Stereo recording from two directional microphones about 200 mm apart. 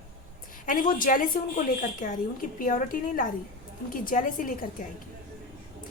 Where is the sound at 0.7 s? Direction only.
45° left (ahead or behind).